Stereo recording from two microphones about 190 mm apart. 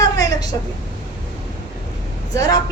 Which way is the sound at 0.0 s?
20° left (ahead or behind).